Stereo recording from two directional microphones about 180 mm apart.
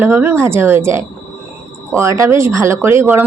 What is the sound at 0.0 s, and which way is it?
A woman's voice, 10° right (ahead or behind).